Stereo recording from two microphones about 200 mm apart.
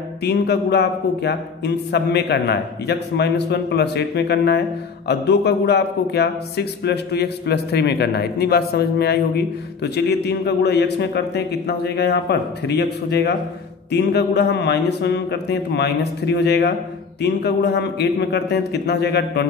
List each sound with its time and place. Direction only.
0.2 s a man's voice: 55° left (ahead or behind)